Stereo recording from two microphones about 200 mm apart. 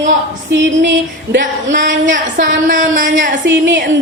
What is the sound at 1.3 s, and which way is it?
Speech, 65° right (ahead or behind).